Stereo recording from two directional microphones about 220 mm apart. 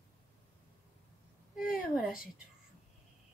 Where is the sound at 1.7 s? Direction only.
Centre (ahead or behind).